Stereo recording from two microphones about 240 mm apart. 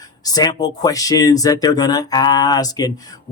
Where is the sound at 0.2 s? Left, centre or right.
Centre.